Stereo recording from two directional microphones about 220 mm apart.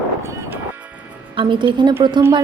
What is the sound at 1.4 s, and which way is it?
Speech, 20° right (ahead or behind).